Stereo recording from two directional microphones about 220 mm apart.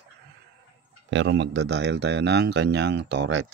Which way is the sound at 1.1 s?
55° right (ahead or behind).